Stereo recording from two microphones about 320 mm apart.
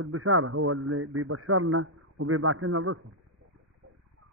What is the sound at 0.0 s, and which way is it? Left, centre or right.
A man's voice, right.